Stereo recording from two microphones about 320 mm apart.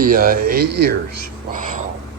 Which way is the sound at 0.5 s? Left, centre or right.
Right.